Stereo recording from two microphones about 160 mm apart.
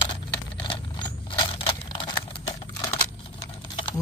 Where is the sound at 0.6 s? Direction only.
30° left (ahead or behind).